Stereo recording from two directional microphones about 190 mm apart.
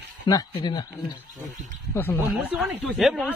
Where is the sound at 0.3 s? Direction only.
20° left (ahead or behind).